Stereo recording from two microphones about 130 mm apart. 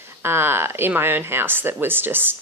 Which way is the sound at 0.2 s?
20° right (ahead or behind).